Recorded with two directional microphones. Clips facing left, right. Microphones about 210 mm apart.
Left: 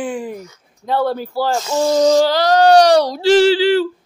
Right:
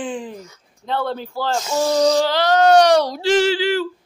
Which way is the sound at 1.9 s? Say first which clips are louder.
Left 4 dB; 30° left (ahead or behind).